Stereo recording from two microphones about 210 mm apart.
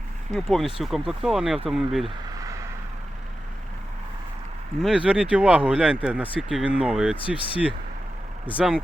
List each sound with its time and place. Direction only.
0.3 s speech: centre (ahead or behind)
2.0 s a sound: 15° right (ahead or behind)
4.8 s speech: 5° right (ahead or behind)
7.2 s speech: 25° left (ahead or behind)
8.5 s speech: 5° right (ahead or behind)